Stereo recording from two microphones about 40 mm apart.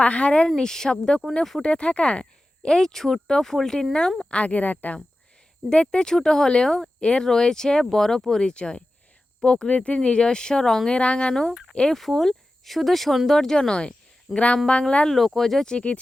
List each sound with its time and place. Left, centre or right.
0.0 s speech: left
0.4 s speech: centre; by 2.2 s left
2.6 s speech: centre
4.3 s speech: left
5.6 s speech: left
7.0 s speech: left
8.4 s speech: left
10.8 s speech: left
12.1 s speech: centre; by 15.0 s left
15.4 s speech: centre